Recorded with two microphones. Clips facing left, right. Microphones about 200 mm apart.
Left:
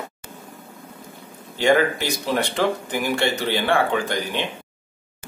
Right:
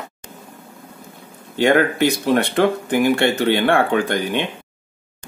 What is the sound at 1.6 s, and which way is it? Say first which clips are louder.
Speech: right 3 dB; 55° right (ahead or behind).